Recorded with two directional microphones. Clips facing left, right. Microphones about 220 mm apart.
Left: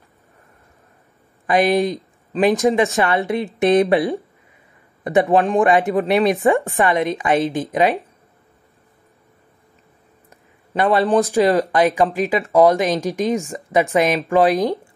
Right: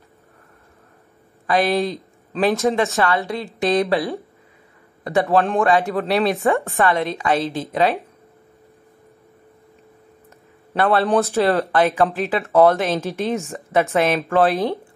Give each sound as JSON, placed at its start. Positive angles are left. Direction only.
{"t": 1.5, "sound": "a woman's voice", "side_deg": 15}
{"t": 5.0, "sound": "speech", "side_deg": 15}
{"t": 10.8, "sound": "speech", "side_deg": 15}